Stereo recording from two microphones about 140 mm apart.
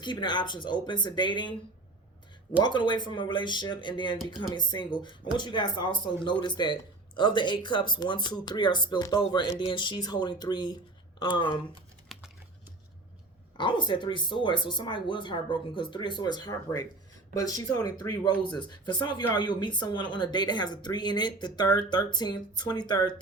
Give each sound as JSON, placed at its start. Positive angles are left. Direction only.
{"t": 0.0, "sound": "speech", "side_deg": 35}
{"t": 2.6, "sound": "speech", "side_deg": 35}
{"t": 12.1, "sound": "typing", "side_deg": 0}
{"t": 13.6, "sound": "speech", "side_deg": 35}